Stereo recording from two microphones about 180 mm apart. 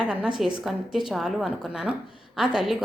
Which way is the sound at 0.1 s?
5° right (ahead or behind).